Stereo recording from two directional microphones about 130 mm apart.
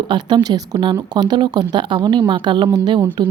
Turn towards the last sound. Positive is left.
turn(degrees=-35)  # may be behind; listen again after turning